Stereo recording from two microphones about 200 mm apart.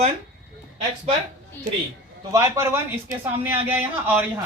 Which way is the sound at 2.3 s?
15° right (ahead or behind).